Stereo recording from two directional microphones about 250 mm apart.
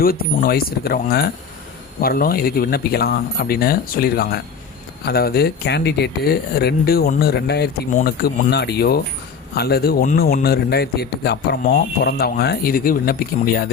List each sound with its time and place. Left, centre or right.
0.0 s speech: left